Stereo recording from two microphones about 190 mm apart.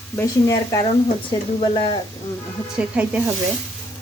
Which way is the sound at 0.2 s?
15° left (ahead or behind).